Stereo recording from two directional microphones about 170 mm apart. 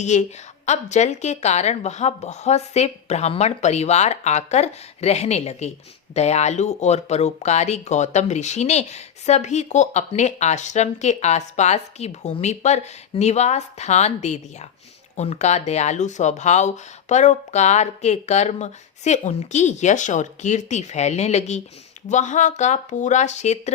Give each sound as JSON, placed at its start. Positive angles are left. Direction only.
{"t": 0.0, "sound": "speech", "side_deg": 45}